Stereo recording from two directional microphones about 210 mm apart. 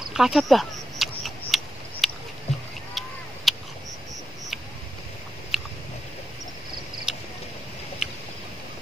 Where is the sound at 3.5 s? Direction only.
Centre (ahead or behind).